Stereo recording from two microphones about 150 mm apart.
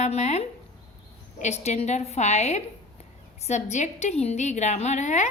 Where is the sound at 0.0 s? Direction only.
45° left (ahead or behind).